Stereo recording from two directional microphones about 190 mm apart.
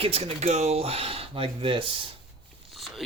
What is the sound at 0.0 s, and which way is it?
Speech, 30° right (ahead or behind).